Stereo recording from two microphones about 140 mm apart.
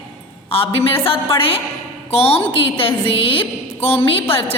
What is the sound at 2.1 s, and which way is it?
A woman's voice, 45° left (ahead or behind).